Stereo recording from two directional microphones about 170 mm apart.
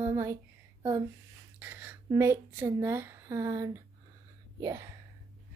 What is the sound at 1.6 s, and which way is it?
Speech, 10° right (ahead or behind).